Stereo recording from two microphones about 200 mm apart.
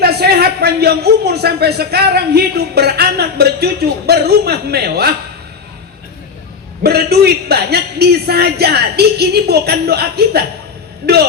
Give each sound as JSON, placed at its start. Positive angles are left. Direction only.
{"t": 0.0, "sound": "a man's voice", "side_deg": -50}
{"t": 6.8, "sound": "a man's voice", "side_deg": -55}